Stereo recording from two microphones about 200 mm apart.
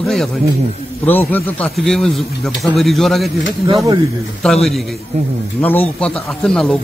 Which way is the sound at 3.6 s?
20° right (ahead or behind).